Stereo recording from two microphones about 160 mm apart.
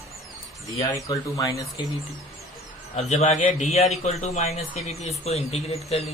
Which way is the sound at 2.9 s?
45° left (ahead or behind).